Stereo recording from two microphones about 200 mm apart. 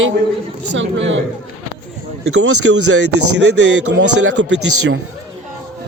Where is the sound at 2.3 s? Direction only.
75° right (ahead or behind).